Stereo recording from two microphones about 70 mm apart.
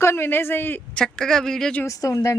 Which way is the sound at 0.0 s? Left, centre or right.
Left.